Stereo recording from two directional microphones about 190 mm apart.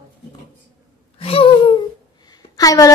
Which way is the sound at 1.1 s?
30° left (ahead or behind).